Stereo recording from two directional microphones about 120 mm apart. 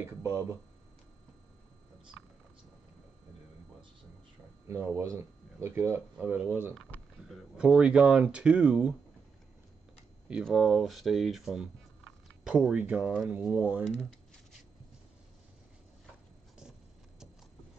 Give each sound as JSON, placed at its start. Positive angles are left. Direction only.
{"t": 0.2, "sound": "speech", "side_deg": -25}
{"t": 4.6, "sound": "speech", "side_deg": -20}
{"t": 6.9, "sound": "a sound", "side_deg": 15}
{"t": 7.2, "sound": "speech", "side_deg": -5}
{"t": 10.4, "sound": "speech", "side_deg": 0}